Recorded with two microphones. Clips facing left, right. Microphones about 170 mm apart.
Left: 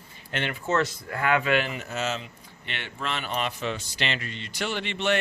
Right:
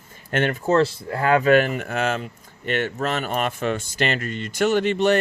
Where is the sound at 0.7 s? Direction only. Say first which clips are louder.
Right 6 dB; 30° right (ahead or behind).